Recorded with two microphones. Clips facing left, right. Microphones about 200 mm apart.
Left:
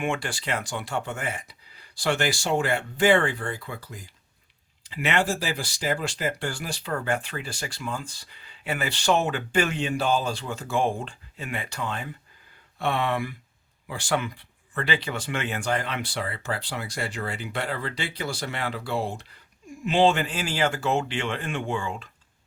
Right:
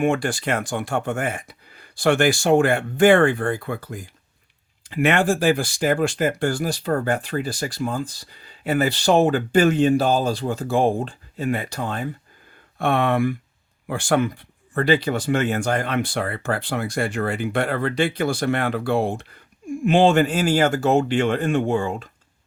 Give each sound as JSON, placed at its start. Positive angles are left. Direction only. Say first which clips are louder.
{"t": 0.0, "sound": "speech", "louder": "right 8 dB", "side_deg": -45}
{"t": 12.8, "sound": "speech", "louder": "right 7 dB", "side_deg": -50}